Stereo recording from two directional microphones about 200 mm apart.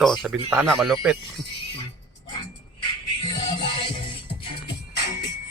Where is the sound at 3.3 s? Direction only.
20° left (ahead or behind).